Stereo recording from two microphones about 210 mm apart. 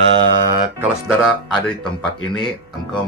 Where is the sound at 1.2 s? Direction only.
Centre (ahead or behind).